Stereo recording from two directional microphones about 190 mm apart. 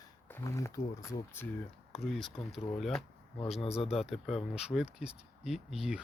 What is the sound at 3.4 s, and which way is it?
Speech, 30° left (ahead or behind).